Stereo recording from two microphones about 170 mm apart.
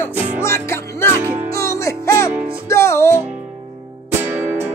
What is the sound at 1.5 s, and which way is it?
Music, 15° left (ahead or behind).